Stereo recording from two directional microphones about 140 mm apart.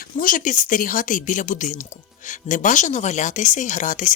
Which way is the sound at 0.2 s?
75° left (ahead or behind).